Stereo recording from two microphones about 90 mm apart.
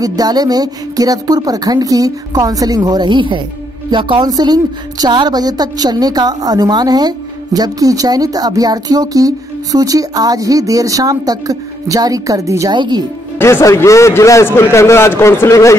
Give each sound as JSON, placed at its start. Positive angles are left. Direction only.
{"t": 0.0, "sound": "a woman's voice", "side_deg": -45}
{"t": 4.3, "sound": "a woman's voice", "side_deg": -50}
{"t": 12.7, "sound": "a woman's voice", "side_deg": -55}
{"t": 13.4, "sound": "a man's voice", "side_deg": 30}